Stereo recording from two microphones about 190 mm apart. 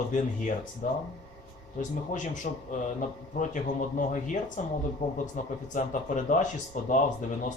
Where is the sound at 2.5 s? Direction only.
40° left (ahead or behind).